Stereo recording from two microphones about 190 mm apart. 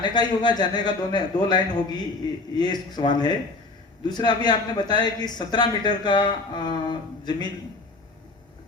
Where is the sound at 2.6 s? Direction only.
20° left (ahead or behind).